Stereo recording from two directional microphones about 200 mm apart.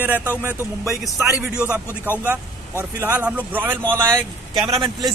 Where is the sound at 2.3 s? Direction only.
10° right (ahead or behind).